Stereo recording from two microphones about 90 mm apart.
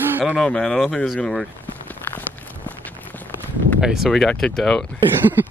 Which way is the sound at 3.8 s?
5° right (ahead or behind).